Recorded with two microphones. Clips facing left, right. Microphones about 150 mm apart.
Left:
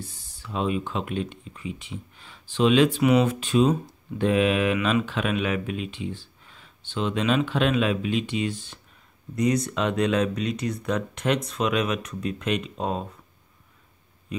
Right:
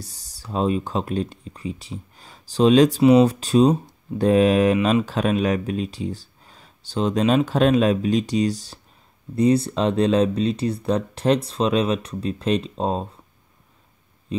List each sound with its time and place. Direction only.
0.0 s speech: 40° right (ahead or behind)